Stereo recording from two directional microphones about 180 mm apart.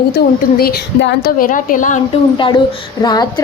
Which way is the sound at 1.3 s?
50° left (ahead or behind).